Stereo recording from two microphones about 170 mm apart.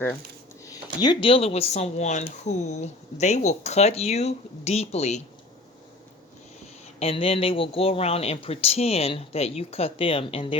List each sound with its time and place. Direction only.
0.6 s speech: 20° left (ahead or behind); by 5.2 s 40° left (ahead or behind)
7.0 s speech: 35° left (ahead or behind)